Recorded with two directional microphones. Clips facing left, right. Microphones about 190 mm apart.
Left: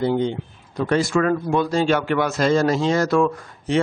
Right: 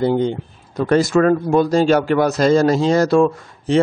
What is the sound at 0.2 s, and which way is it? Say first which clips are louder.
Speech: right 3 dB; 45° right (ahead or behind).